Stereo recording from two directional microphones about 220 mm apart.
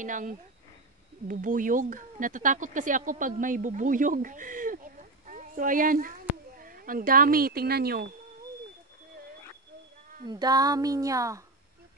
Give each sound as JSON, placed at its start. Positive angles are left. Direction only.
{"t": 0.0, "sound": "speech", "side_deg": -35}
{"t": 10.2, "sound": "speech", "side_deg": -15}